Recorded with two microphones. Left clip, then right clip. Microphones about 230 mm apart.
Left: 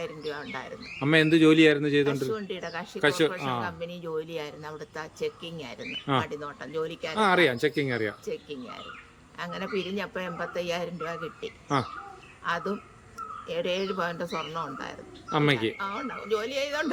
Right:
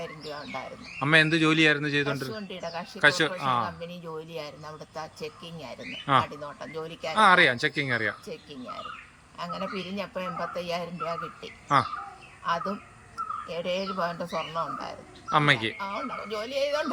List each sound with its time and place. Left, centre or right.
0.0 s a man's voice: centre